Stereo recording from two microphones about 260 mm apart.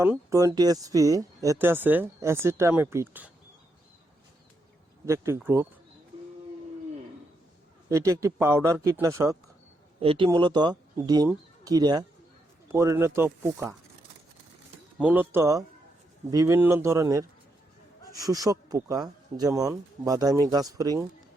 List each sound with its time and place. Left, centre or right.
0.0 s speech: centre
5.0 s speech: centre
7.9 s speech: centre
14.9 s speech: centre